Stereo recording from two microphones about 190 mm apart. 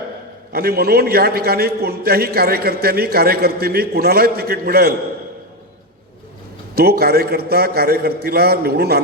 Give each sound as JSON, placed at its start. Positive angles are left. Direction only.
{"t": 0.5, "sound": "a man's voice", "side_deg": -55}
{"t": 6.7, "sound": "a man's voice", "side_deg": -55}